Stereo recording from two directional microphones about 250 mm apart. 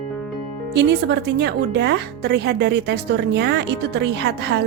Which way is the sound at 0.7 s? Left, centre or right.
Right.